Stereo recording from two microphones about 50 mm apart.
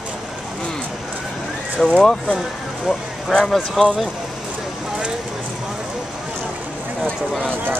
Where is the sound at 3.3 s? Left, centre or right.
Centre.